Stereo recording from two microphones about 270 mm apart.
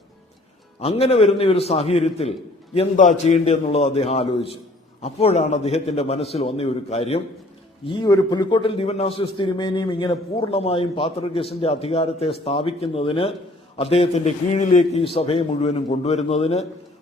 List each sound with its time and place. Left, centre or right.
0.8 s a man's voice: left